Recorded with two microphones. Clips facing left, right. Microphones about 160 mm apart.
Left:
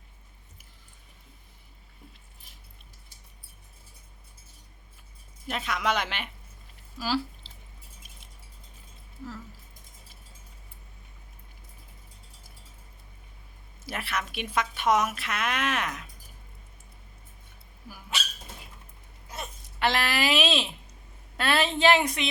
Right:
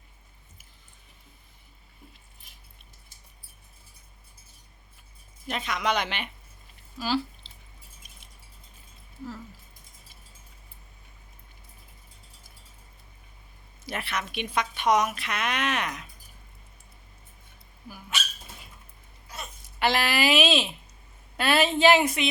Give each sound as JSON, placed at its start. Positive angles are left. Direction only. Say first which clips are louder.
{"t": 5.5, "sound": "a woman's voice", "louder": "right 1 dB", "side_deg": 5}
{"t": 7.4, "sound": "squish", "louder": "left 2 dB", "side_deg": 0}
{"t": 13.8, "sound": "a woman's voice", "louder": "even", "side_deg": 5}
{"t": 18.1, "sound": "speech", "louder": "even", "side_deg": 30}
{"t": 19.6, "sound": "a woman's voice", "louder": "right 2 dB", "side_deg": -5}